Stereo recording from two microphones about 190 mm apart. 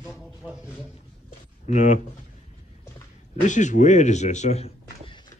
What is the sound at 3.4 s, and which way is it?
Speech, 40° left (ahead or behind).